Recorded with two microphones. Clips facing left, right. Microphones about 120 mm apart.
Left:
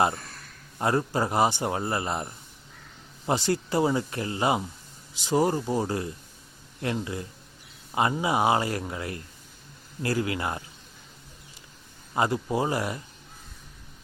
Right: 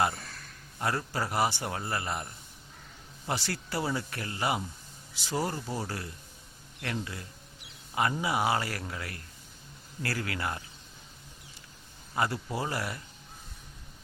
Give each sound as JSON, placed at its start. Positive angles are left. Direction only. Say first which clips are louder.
{"t": 0.8, "sound": "a man's voice", "louder": "left 7 dB", "side_deg": 25}
{"t": 12.1, "sound": "a man's voice", "louder": "left 6 dB", "side_deg": 20}